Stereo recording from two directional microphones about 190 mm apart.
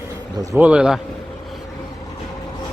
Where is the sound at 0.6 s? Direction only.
5° right (ahead or behind).